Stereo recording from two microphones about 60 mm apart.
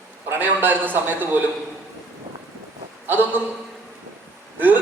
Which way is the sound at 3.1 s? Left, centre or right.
Right.